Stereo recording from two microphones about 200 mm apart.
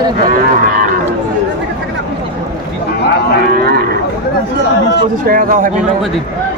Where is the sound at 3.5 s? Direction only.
50° right (ahead or behind).